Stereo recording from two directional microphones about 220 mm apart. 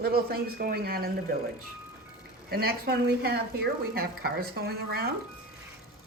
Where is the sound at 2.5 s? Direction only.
45° right (ahead or behind).